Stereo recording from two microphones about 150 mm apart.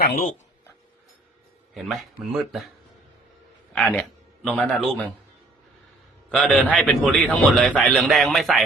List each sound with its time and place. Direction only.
0.0 s speech: 90° left
1.7 s a man's voice: centre (ahead or behind)
3.7 s a man's voice: 5° left (ahead or behind)
6.3 s a man's voice: 5° left (ahead or behind)